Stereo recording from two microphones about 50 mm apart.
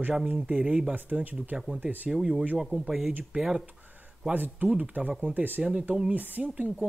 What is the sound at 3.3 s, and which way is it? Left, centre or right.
Speech, right.